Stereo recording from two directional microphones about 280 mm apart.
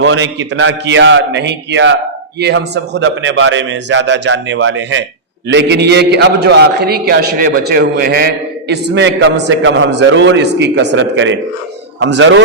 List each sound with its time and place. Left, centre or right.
0.0 s a man's voice: right